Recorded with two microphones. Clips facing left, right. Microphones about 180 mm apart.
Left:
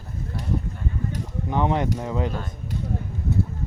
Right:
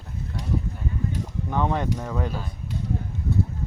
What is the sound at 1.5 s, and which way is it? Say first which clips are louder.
Speech: left 2 dB; 20° left (ahead or behind).